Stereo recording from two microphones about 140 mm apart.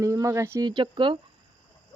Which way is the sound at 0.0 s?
20° right (ahead or behind).